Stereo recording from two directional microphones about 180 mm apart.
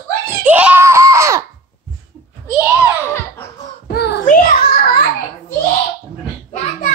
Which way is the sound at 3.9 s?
60° left (ahead or behind).